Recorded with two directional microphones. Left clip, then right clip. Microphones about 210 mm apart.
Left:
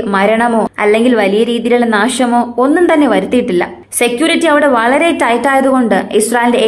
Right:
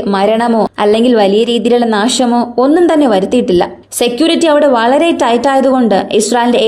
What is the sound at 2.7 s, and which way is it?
A woman's voice, 45° right (ahead or behind).